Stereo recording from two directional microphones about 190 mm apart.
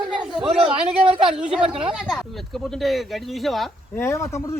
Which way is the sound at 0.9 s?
30° right (ahead or behind).